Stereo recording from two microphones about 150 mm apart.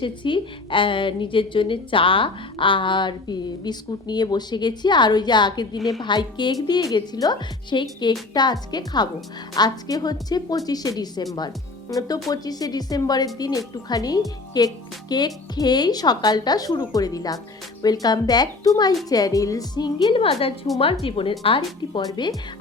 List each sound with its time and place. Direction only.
0.0 s a woman's voice: 35° left (ahead or behind)